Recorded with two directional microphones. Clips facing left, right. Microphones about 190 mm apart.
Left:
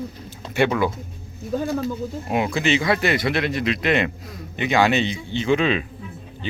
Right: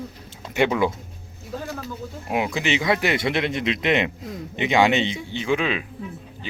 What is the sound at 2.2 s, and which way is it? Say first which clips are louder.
Speech: left 2 dB; 10° right (ahead or behind).